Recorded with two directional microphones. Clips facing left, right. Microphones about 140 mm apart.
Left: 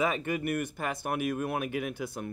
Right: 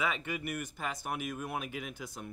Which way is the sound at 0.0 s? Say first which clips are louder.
Left 6 dB; 45° left (ahead or behind).